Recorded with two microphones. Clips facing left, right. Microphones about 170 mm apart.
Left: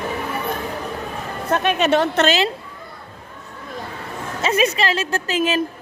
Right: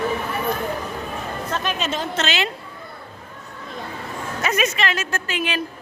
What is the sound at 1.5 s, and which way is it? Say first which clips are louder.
Speech: left 9 dB; 60° left (ahead or behind).